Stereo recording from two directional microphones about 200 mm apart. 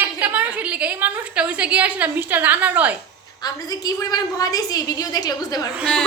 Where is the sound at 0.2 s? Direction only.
5° right (ahead or behind).